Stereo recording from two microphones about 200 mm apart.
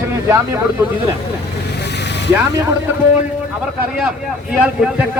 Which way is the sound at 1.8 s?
60° left (ahead or behind).